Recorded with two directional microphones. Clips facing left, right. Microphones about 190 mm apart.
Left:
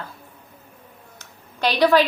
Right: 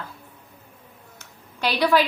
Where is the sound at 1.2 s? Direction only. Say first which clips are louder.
Left 3 dB; 10° right (ahead or behind).